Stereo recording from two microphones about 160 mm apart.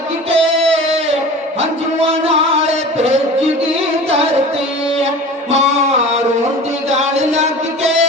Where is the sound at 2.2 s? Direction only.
40° right (ahead or behind).